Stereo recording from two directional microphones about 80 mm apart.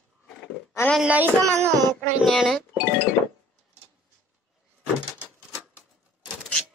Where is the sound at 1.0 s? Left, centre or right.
Right.